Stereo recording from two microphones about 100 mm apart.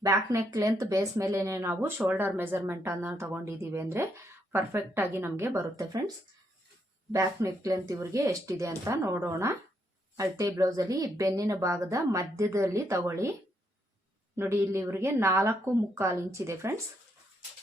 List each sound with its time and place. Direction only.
0.0 s a woman's voice: 35° right (ahead or behind)
7.1 s a woman's voice: 35° right (ahead or behind)
14.3 s a woman's voice: 25° right (ahead or behind)